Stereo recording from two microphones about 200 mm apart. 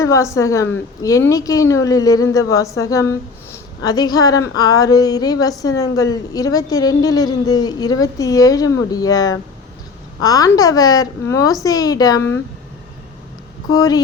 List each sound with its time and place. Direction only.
0.0 s a woman's voice: 15° left (ahead or behind)
13.7 s mantra: 20° left (ahead or behind)